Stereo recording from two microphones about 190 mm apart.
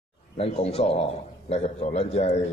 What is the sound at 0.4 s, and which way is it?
A man's voice, 35° left (ahead or behind).